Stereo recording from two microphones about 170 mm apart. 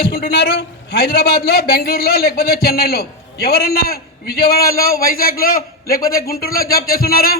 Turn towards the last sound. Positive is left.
turn(degrees=60)  # may be behind; listen again after turning